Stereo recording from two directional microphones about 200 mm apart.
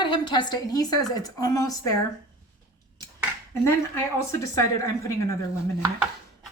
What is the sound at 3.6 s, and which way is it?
Speech, 15° left (ahead or behind).